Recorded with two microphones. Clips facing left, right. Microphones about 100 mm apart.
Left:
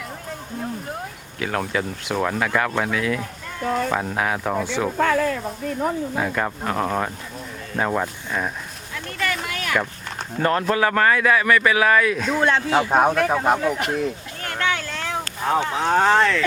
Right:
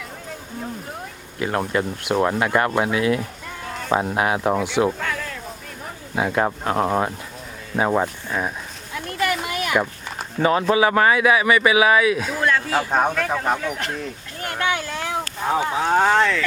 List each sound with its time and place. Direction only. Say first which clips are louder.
1.5 s a man's voice: right 2 dB; 5° right (ahead or behind)
4.9 s speech: left 9 dB; 55° left (ahead or behind)
6.1 s a man's voice: right 3 dB; 15° right (ahead or behind)
9.1 s a sound: right 3 dB; 15° right (ahead or behind)
10.4 s a man's voice: right 2 dB; 5° right (ahead or behind)
12.4 s speech: left 5 dB; 25° left (ahead or behind); by 14.0 s 10° left (ahead or behind)
14.4 s a sound: right 1 dB; 15° right (ahead or behind)
15.4 s speech: even; 5° right (ahead or behind)